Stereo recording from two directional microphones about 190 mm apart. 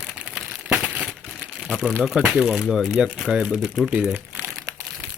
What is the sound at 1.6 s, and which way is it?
Speech, centre (ahead or behind).